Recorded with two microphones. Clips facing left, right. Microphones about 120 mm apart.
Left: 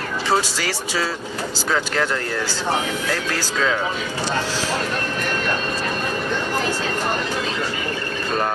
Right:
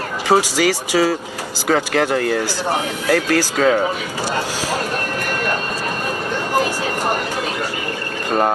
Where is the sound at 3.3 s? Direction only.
45° right (ahead or behind).